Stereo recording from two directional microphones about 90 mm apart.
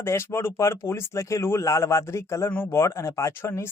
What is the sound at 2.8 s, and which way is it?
Speech, 30° left (ahead or behind).